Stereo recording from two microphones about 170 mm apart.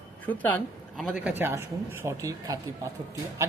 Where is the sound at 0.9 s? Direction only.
5° right (ahead or behind).